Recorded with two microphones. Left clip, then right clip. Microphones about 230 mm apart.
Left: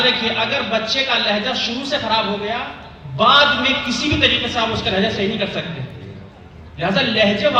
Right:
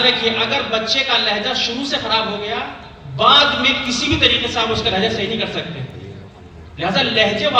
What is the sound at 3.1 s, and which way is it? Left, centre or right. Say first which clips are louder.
Speech: even; right.